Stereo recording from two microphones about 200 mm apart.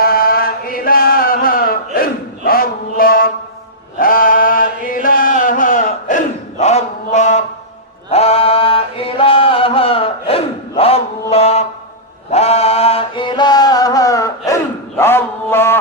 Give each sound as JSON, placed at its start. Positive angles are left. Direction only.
{"t": 0.0, "sound": "chant", "side_deg": 45}
{"t": 5.0, "sound": "battle cry", "side_deg": 45}
{"t": 8.1, "sound": "chant", "side_deg": 30}